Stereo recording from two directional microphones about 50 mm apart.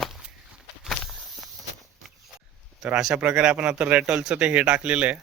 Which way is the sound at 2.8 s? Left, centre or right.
Centre.